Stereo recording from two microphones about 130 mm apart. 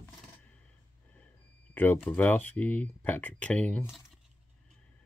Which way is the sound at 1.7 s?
15° left (ahead or behind).